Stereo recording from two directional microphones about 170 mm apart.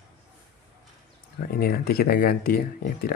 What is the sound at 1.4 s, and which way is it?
Speech, 60° left (ahead or behind).